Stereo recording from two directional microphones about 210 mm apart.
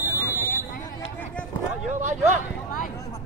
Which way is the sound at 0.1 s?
15° left (ahead or behind).